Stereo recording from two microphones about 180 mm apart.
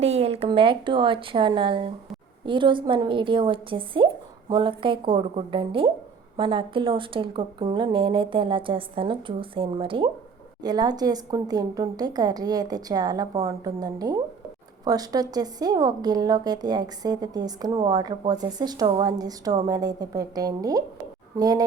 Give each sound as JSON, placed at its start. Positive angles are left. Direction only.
{"t": 0.0, "sound": "speech", "side_deg": -35}